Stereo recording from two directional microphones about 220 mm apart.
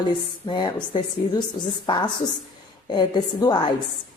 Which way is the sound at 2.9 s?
20° left (ahead or behind).